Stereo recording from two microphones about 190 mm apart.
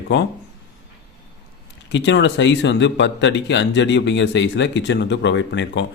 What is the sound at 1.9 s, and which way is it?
Speech, 70° left (ahead or behind).